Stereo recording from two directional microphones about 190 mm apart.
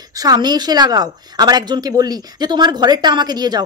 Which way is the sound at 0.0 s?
20° right (ahead or behind).